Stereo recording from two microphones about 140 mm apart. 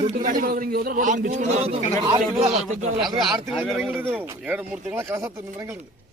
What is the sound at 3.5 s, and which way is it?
Speech, 5° right (ahead or behind).